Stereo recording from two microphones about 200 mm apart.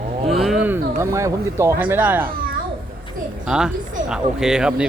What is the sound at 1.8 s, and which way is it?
Speech, 10° right (ahead or behind).